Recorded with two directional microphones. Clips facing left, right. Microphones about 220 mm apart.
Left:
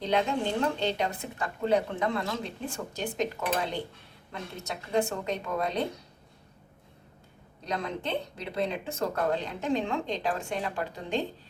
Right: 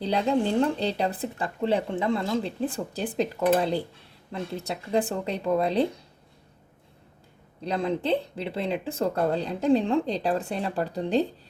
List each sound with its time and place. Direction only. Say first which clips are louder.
0.0 s speech: right 3 dB; 35° right (ahead or behind)
7.6 s speech: right 6 dB; 30° right (ahead or behind)